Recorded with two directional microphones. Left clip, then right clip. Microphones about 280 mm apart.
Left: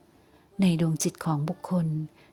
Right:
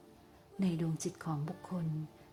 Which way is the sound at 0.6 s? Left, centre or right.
Left.